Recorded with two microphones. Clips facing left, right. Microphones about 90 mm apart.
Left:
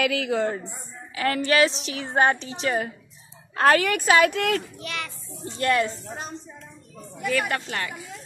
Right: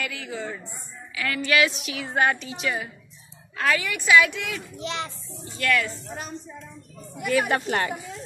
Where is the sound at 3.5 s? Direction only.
50° left (ahead or behind).